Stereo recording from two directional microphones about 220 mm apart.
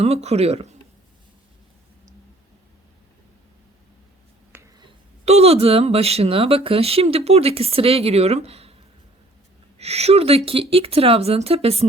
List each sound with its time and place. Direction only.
0.0 s speech: 30° right (ahead or behind)
4.5 s finger snapping: 10° right (ahead or behind)
5.2 s speech: 30° right (ahead or behind)
9.7 s speech: 30° right (ahead or behind)